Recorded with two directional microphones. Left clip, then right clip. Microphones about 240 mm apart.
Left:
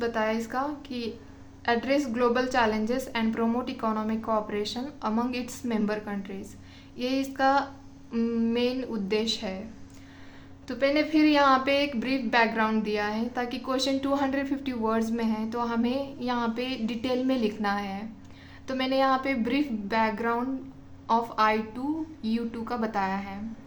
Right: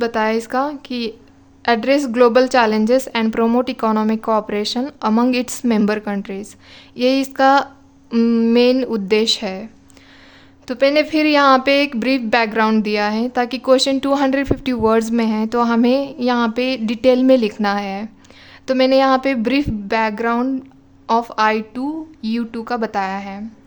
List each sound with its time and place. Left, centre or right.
0.0 s a woman's voice: right
10.7 s a woman's voice: right